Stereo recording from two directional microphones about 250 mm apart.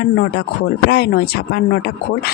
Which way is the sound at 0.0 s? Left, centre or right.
Left.